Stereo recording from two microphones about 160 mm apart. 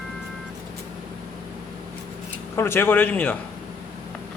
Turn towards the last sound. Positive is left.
turn(degrees=10)  # may be behind; listen again after turning